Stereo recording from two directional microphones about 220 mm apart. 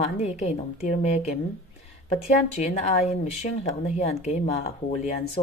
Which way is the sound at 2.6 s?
30° left (ahead or behind).